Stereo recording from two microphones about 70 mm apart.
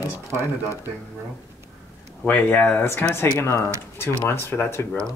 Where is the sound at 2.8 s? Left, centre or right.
Left.